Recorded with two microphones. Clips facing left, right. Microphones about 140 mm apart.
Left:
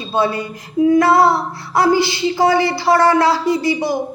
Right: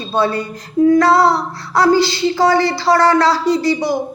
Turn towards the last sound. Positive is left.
turn(degrees=20)  # may be behind; listen again after turning